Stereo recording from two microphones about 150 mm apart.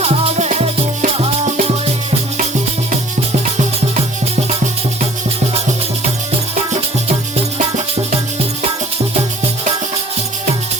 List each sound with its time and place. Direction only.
0.0 s music: 45° right (ahead or behind)